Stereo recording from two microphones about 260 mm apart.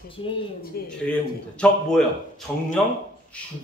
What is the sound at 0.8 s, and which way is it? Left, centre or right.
Speech, left.